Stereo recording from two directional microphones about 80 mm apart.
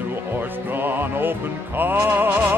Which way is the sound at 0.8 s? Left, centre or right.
Right.